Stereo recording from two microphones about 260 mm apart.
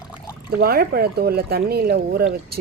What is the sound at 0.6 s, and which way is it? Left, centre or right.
Speech, right.